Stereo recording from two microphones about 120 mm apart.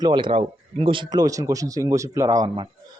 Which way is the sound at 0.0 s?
40° right (ahead or behind).